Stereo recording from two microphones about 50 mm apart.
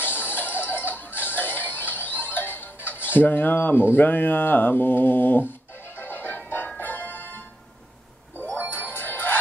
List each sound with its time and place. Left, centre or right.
0.0 s music: left
8.6 s music: left